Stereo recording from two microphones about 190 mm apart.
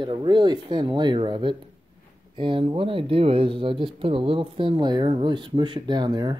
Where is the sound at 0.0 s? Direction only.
25° right (ahead or behind).